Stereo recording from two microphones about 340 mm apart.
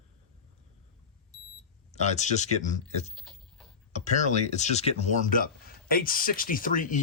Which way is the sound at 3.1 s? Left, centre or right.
Centre.